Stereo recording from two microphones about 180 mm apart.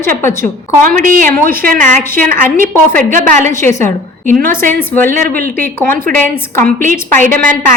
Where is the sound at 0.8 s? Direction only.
50° right (ahead or behind).